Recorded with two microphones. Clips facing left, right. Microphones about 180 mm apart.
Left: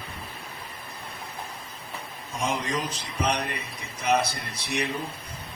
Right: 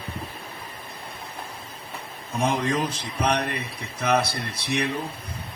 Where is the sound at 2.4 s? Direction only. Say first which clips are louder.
Right 5 dB; 65° right (ahead or behind).